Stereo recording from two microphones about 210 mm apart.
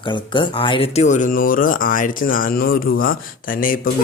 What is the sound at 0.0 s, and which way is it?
Speech, 20° left (ahead or behind).